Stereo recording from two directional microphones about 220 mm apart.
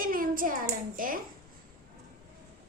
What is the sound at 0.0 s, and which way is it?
A child's voice, 40° right (ahead or behind).